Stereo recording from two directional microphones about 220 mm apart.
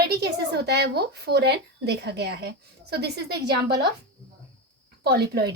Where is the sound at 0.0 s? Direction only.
45° right (ahead or behind).